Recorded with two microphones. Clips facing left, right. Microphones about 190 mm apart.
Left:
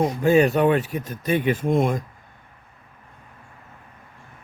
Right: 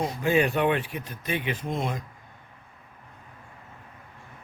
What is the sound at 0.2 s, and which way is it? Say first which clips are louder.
Speech: left 5 dB; 45° left (ahead or behind).